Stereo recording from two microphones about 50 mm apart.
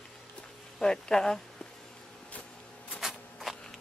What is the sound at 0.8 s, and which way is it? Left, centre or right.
Speech, centre.